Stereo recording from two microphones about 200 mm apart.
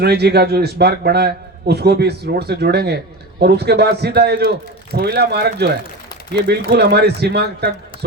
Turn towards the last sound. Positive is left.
turn(degrees=-55)  # may be behind; listen again after turning